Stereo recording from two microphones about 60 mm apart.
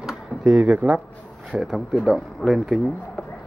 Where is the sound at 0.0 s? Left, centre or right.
Centre.